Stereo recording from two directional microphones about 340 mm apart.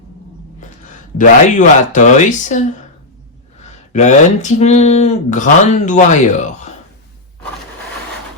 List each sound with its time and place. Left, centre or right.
0.6 s a sound: left
1.2 s speech: left
3.9 s speech: left